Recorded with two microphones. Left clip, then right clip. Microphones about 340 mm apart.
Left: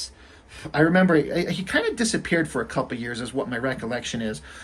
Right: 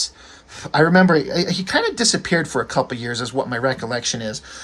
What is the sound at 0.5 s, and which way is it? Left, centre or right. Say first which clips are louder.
Speech: right 5 dB; centre.